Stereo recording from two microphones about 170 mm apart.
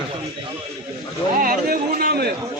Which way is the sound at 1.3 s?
60° right (ahead or behind).